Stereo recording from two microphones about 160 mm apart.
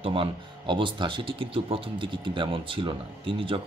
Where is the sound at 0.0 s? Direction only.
35° right (ahead or behind).